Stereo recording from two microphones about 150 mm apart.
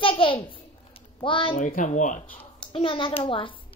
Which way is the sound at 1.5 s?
60° left (ahead or behind).